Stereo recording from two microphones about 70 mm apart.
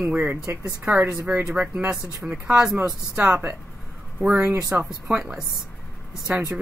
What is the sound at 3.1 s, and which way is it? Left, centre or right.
Speech, right.